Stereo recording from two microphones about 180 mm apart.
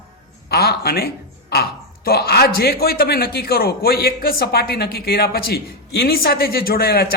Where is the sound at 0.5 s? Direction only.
60° left (ahead or behind).